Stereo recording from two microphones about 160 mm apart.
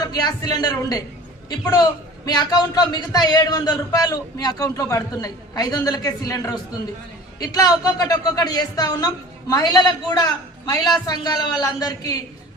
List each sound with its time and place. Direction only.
0.0 s a man's voice: 25° left (ahead or behind)